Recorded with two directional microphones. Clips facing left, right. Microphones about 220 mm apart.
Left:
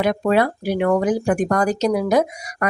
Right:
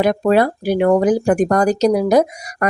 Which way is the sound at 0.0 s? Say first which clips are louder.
Right 3 dB; 35° right (ahead or behind).